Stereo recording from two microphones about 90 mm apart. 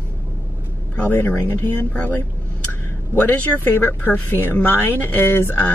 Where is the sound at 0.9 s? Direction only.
20° left (ahead or behind).